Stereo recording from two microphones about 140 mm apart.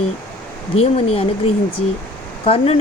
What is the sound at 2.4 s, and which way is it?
Speech, 45° left (ahead or behind).